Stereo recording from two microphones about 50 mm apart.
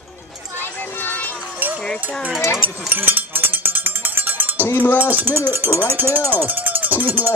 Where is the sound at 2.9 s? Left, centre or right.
Right.